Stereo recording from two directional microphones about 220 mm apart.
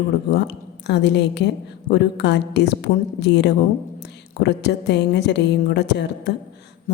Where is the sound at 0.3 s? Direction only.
50° left (ahead or behind).